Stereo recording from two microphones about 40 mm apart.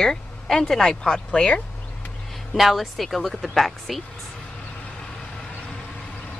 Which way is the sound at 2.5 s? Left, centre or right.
Centre.